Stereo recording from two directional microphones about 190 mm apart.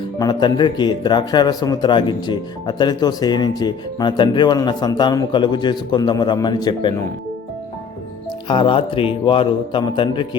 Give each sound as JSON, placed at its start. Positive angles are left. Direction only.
{"t": 0.2, "sound": "speech", "side_deg": 20}
{"t": 8.4, "sound": "speech", "side_deg": 25}